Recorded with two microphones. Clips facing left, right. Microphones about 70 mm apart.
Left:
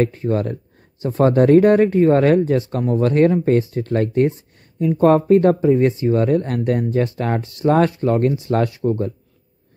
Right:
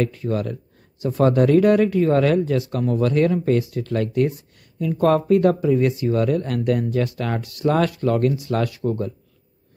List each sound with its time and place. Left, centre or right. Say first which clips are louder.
0.0 s speech: left 4 dB; left